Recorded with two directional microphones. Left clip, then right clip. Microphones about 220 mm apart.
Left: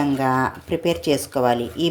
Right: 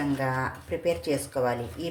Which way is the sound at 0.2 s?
35° left (ahead or behind).